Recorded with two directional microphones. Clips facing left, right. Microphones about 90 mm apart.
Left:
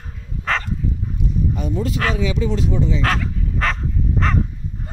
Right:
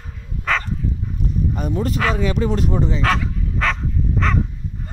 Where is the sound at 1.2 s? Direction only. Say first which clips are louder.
Even; 50° right (ahead or behind).